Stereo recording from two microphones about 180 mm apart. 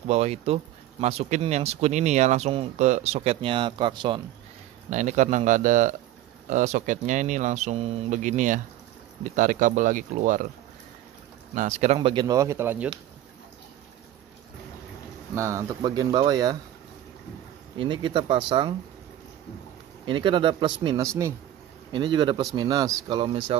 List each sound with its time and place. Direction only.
0.1 s speech: 35° right (ahead or behind)
4.8 s speech: 40° right (ahead or behind)
11.5 s speech: 40° right (ahead or behind); by 12.9 s 10° right (ahead or behind)
15.3 s speech: 15° right (ahead or behind)
17.7 s speech: 25° right (ahead or behind)
20.1 s speech: 25° right (ahead or behind)